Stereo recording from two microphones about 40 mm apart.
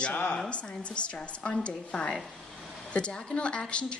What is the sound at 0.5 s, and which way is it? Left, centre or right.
A woman's voice, left.